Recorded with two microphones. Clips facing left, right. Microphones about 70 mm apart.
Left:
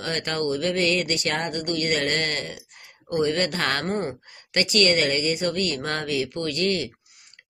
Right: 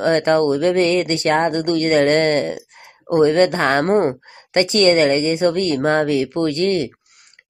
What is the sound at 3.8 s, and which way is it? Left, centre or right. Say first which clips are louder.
Speech: right 11 dB; right.